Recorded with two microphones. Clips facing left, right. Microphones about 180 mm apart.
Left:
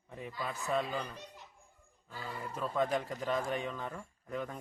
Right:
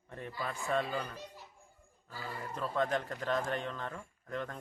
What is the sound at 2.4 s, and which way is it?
Speech, 10° left (ahead or behind).